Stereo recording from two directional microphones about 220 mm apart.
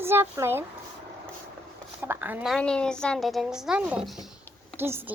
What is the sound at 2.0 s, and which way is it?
A woman's voice, 10° right (ahead or behind).